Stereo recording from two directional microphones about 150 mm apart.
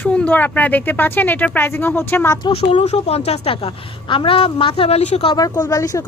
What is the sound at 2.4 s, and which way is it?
A woman's voice, 40° left (ahead or behind).